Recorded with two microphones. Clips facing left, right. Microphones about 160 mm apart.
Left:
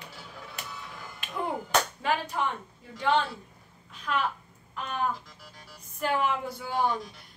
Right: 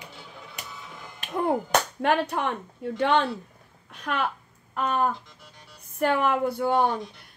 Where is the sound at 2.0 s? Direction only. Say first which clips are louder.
Right 5 dB; 65° right (ahead or behind).